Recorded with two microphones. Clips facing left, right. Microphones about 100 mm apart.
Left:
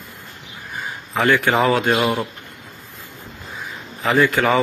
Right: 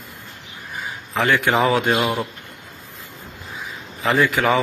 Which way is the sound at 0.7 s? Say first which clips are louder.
Left 1 dB; centre (ahead or behind).